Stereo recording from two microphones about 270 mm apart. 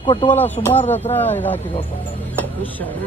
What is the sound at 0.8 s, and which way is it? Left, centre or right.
Speech, left.